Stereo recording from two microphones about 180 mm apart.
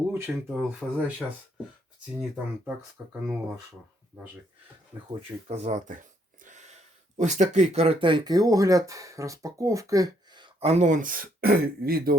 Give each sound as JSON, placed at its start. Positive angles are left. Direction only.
{"t": 0.1, "sound": "speech", "side_deg": -10}
{"t": 2.3, "sound": "speech", "side_deg": -5}
{"t": 5.5, "sound": "a sound", "side_deg": -40}
{"t": 7.2, "sound": "speech", "side_deg": -40}